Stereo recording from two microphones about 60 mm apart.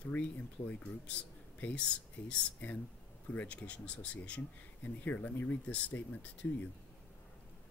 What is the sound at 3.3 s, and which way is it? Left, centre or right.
Speech, left.